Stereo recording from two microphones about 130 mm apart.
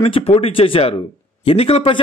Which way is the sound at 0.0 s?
50° left (ahead or behind).